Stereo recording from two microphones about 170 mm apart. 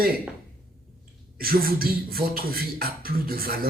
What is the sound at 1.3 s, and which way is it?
Speech, 60° right (ahead or behind).